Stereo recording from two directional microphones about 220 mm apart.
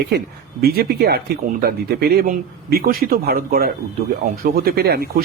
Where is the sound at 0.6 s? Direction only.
45° right (ahead or behind).